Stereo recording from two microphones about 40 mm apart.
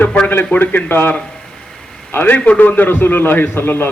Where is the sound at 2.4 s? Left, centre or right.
Left.